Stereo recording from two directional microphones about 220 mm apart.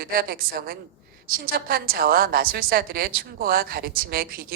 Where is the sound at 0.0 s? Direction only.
40° right (ahead or behind).